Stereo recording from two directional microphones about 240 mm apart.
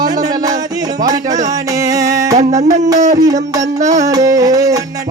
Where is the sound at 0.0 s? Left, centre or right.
Centre.